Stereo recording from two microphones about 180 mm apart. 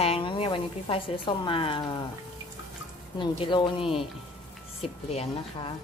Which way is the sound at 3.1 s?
25° left (ahead or behind).